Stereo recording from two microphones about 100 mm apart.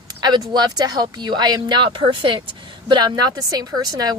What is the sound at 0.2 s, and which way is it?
A woman's voice, 45° right (ahead or behind).